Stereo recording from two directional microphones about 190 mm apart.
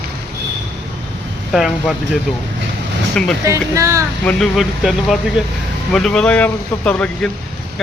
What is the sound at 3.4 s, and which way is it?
Speech, 15° right (ahead or behind).